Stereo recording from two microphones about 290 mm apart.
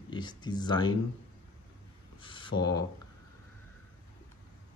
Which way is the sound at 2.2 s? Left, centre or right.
Centre.